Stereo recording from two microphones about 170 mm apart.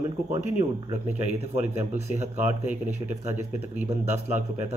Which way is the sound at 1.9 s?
40° right (ahead or behind).